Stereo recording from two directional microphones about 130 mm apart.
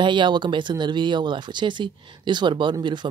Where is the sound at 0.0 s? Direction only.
35° right (ahead or behind).